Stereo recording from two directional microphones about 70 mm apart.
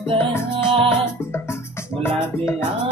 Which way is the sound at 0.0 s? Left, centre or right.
Left.